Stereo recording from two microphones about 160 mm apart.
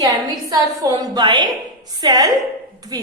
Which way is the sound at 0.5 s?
20° right (ahead or behind).